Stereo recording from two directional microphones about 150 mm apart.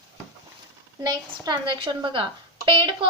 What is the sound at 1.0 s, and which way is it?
A woman's voice, 25° right (ahead or behind).